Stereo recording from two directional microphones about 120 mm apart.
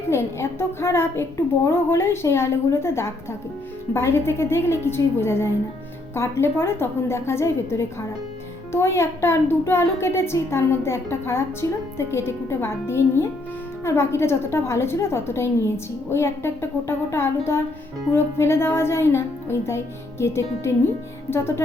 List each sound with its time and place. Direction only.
0.1 s a woman's voice: 20° left (ahead or behind)